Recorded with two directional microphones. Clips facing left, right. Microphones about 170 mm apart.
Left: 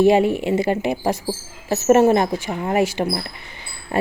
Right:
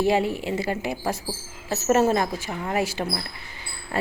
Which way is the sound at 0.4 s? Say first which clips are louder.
Left 7 dB; 20° left (ahead or behind).